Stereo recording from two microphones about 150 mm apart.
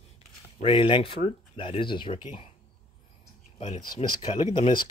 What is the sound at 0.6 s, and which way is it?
Speech, 35° left (ahead or behind).